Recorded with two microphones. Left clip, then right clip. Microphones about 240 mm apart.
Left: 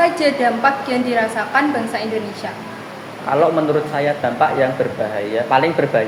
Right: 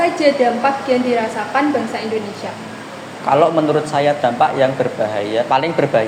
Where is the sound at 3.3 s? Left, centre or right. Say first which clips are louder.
Right 2 dB; right.